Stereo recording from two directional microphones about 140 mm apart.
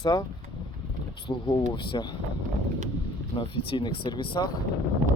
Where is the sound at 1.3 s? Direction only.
35° left (ahead or behind).